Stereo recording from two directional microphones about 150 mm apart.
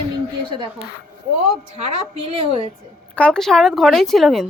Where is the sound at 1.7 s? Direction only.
40° right (ahead or behind).